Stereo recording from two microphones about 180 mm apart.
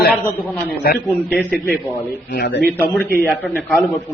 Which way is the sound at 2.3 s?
60° left (ahead or behind).